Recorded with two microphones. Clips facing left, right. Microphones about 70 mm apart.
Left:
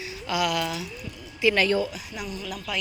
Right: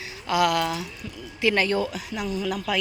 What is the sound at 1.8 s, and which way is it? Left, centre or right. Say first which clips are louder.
Speech: right 1 dB; right.